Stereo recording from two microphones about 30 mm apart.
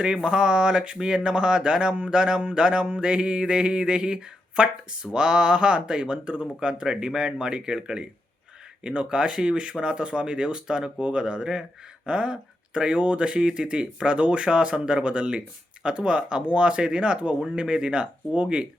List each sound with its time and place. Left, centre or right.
0.0 s speech: right